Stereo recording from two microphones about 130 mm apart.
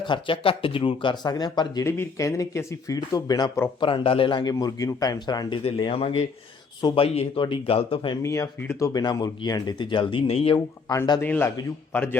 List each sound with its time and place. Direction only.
0.0 s speech: 40° left (ahead or behind)
5.7 s speech: 45° left (ahead or behind)
8.2 s speech: 25° left (ahead or behind); by 10.5 s 50° left (ahead or behind)
11.2 s a man's voice: 15° left (ahead or behind)